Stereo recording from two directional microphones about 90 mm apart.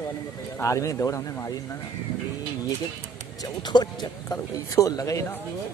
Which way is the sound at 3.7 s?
55° left (ahead or behind).